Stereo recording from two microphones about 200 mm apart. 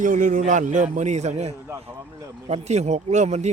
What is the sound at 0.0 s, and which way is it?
Speech, 40° right (ahead or behind).